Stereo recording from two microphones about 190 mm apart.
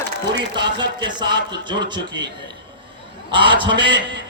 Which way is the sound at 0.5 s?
25° right (ahead or behind).